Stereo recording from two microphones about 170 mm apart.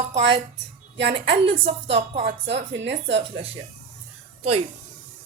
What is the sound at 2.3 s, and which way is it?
Speech, 90° right.